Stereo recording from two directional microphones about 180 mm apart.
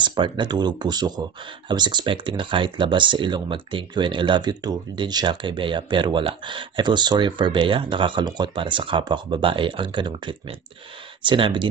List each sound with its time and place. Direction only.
0.0 s speech: 25° right (ahead or behind)